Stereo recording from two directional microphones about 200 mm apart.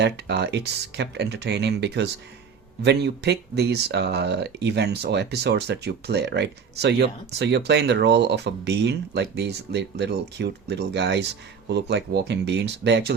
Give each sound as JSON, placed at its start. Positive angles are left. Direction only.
{"t": 0.0, "sound": "speech", "side_deg": -55}